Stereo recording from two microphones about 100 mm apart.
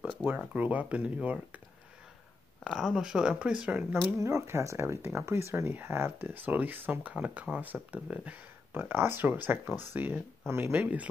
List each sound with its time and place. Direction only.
0.6 s speech: 15° right (ahead or behind)
2.6 s speech: centre (ahead or behind); by 4.0 s 20° right (ahead or behind)
4.2 s speech: 30° right (ahead or behind)